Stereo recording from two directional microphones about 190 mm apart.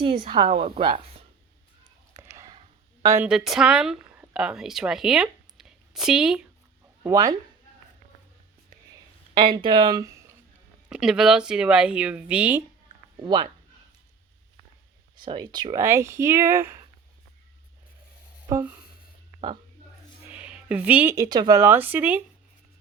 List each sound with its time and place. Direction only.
0.2 s a woman's voice: 30° right (ahead or behind)
2.1 s whispering: 15° right (ahead or behind)
3.0 s speech: 15° right (ahead or behind)
3.2 s speech: centre (ahead or behind)
7.0 s speech: 15° right (ahead or behind)
9.4 s speech: 25° right (ahead or behind)
10.8 s speech: 5° right (ahead or behind)
13.2 s a woman's voice: 25° right (ahead or behind)
15.1 s speech: 25° right (ahead or behind)
18.4 s speech: 10° right (ahead or behind)
20.3 s speech: 5° right (ahead or behind)